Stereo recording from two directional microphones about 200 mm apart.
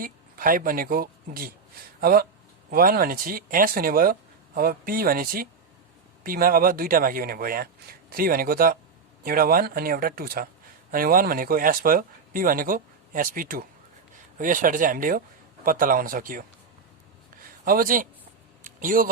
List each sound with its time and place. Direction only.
0.0 s speech: 45° right (ahead or behind)
17.7 s speech: 45° right (ahead or behind)
18.6 s a sound: 40° right (ahead or behind)